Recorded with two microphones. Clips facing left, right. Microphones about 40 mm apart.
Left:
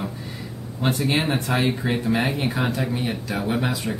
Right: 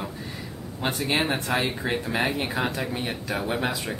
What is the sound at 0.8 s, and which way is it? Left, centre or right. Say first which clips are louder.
Speech: left 3 dB; centre.